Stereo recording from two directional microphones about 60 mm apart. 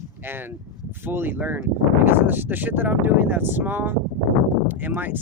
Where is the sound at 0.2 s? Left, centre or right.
Right.